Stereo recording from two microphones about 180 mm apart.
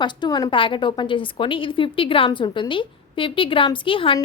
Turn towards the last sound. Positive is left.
turn(degrees=30)  # may be behind; listen again after turning